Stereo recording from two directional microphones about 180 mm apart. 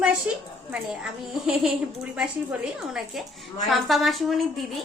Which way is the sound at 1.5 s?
5° right (ahead or behind).